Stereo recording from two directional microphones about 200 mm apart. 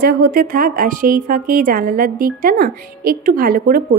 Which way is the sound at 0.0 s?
50° right (ahead or behind).